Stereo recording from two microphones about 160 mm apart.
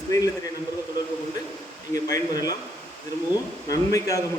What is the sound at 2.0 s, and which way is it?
Speech, 20° left (ahead or behind).